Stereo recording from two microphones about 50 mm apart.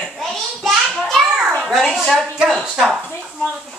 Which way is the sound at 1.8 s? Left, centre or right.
Centre.